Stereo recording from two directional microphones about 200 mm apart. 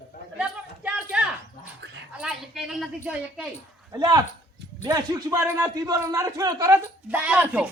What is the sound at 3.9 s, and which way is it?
A man's voice, 20° right (ahead or behind).